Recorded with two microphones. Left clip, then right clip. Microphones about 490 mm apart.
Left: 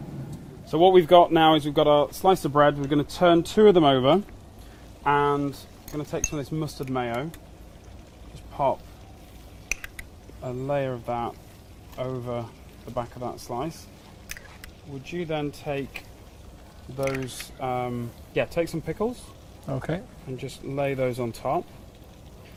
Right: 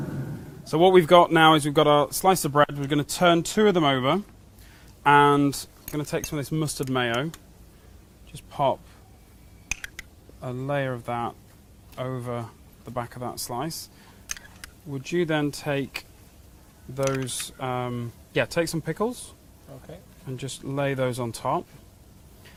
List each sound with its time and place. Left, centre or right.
0.7 s speech: right
2.2 s speech: right; by 4.2 s centre
5.0 s speech: right
6.0 s speech: right
8.5 s speech: right
10.4 s speech: right
15.0 s speech: right
17.0 s speech: right
19.7 s speech: left
20.3 s speech: right